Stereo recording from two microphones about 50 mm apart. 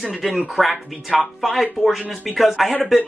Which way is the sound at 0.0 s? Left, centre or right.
Centre.